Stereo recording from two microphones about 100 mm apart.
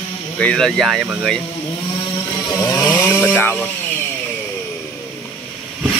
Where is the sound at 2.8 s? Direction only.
20° left (ahead or behind).